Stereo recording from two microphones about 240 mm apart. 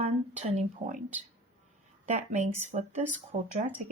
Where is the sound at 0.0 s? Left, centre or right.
Right.